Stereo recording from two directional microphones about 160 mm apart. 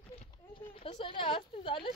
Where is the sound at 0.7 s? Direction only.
35° left (ahead or behind).